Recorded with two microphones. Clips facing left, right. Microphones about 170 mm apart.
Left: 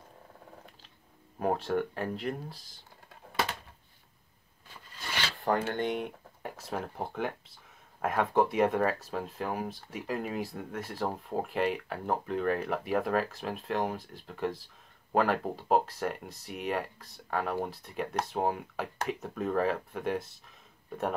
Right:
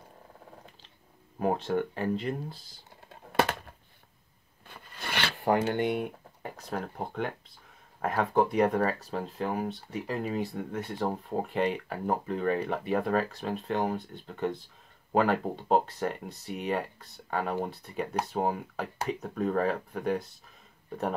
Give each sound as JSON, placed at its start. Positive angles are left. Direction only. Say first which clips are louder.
{"t": 1.4, "sound": "speech", "louder": "right 1 dB", "side_deg": 0}
{"t": 4.6, "sound": "filing", "louder": "right 3 dB", "side_deg": -60}
{"t": 5.3, "sound": "speech", "louder": "right 3 dB", "side_deg": -20}